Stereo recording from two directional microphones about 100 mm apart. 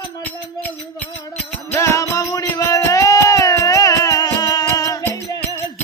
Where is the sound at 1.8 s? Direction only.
30° left (ahead or behind).